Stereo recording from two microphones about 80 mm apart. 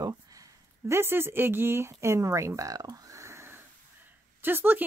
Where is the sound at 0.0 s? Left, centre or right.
Right.